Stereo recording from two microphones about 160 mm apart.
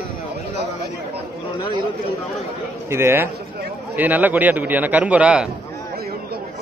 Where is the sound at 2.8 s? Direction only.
15° right (ahead or behind).